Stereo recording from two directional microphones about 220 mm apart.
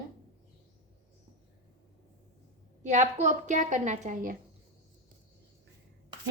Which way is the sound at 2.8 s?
35° right (ahead or behind).